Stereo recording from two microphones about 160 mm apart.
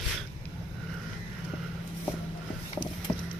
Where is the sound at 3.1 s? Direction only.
30° left (ahead or behind).